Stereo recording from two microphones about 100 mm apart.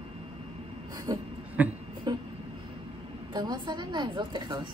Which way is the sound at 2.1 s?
45° right (ahead or behind).